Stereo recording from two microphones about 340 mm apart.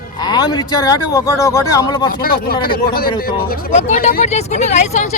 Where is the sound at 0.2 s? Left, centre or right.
Centre.